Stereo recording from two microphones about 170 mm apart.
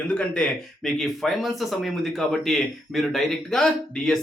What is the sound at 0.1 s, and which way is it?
Speech, 5° left (ahead or behind).